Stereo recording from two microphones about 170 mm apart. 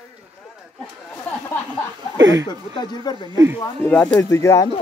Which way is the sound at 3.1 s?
20° left (ahead or behind).